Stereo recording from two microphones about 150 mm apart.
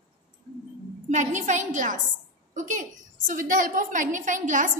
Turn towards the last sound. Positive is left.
turn(degrees=-60)  # may be behind; listen again after turning